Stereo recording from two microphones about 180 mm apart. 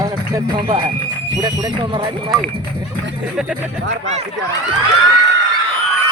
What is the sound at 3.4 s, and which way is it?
Speech, 5° right (ahead or behind).